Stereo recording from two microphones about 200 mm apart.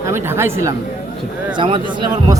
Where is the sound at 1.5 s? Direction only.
25° right (ahead or behind).